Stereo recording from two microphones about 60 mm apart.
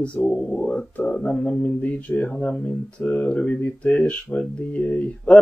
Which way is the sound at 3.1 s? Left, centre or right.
Left.